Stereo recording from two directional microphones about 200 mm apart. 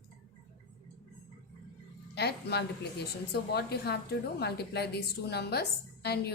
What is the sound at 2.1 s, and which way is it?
A woman's voice, 55° left (ahead or behind).